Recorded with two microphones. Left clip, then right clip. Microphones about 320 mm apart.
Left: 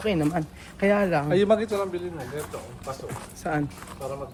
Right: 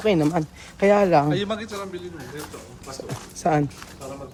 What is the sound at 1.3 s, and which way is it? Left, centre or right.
Speech, centre.